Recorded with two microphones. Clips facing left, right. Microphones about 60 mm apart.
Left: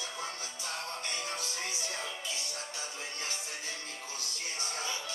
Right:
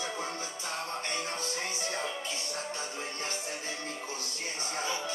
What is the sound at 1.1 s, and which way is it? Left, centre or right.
Music, right.